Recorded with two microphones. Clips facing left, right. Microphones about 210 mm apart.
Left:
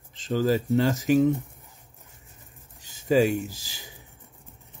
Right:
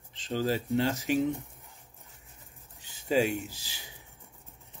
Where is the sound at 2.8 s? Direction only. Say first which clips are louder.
Left 6 dB; 40° left (ahead or behind).